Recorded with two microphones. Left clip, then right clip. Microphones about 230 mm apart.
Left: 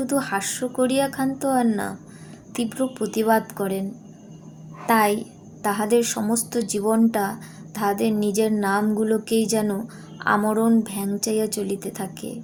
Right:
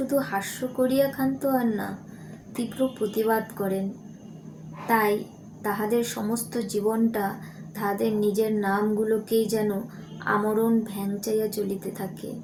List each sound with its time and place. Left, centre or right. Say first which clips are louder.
0.1 s a woman's voice: left 3 dB; left
4.9 s a woman's voice: left 3 dB; left